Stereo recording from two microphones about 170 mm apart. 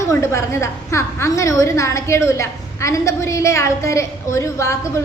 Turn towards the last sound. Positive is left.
turn(degrees=15)  # may be behind; listen again after turning